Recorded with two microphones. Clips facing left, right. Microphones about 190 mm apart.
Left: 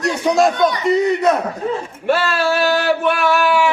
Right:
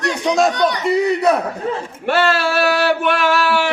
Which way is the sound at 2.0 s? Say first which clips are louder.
Right 1 dB; 70° right (ahead or behind).